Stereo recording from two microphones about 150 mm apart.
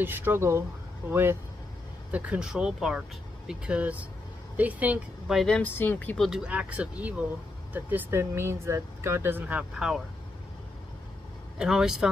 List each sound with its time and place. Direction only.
0.0 s speech: 15° right (ahead or behind)
5.4 s speech: 10° left (ahead or behind)
11.5 s speech: 5° right (ahead or behind)